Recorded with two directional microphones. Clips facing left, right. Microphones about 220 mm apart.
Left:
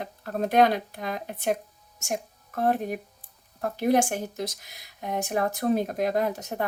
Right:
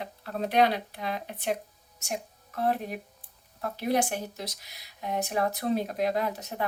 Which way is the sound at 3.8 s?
50° left (ahead or behind).